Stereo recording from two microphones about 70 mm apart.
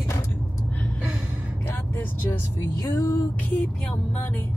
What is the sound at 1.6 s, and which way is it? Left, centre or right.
Speech, left.